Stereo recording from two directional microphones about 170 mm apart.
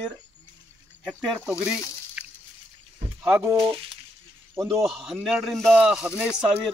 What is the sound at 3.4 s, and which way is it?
Speech, 25° right (ahead or behind).